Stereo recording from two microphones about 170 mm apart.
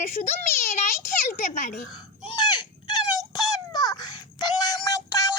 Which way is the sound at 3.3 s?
20° left (ahead or behind).